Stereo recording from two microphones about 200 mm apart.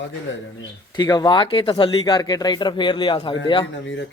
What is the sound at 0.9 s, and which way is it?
Speech, 20° left (ahead or behind).